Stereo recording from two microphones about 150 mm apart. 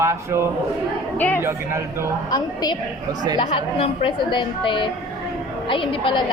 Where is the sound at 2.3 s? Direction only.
25° left (ahead or behind).